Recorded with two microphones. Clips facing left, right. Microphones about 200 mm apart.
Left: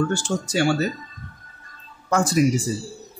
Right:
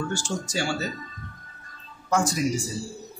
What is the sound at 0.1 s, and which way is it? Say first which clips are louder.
Speech: left 5 dB; 60° left (ahead or behind).